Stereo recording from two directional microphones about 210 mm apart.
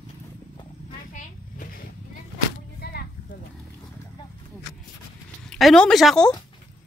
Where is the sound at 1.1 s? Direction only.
40° left (ahead or behind).